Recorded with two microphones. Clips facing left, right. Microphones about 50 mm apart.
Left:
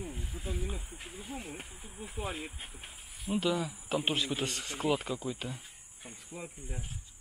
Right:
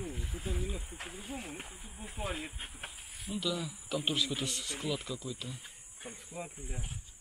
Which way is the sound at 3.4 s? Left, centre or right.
Left.